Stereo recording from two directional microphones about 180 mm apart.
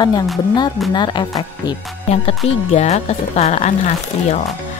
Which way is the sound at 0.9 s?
25° left (ahead or behind).